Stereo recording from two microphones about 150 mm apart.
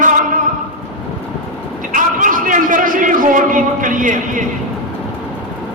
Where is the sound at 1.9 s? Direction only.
60° right (ahead or behind).